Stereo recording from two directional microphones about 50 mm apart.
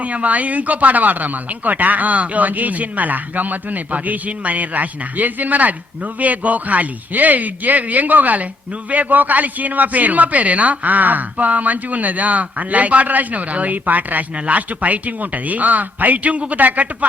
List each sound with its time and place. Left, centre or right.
0.0 s speech: right